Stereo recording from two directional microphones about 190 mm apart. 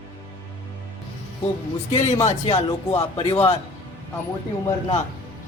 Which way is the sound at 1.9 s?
40° left (ahead or behind).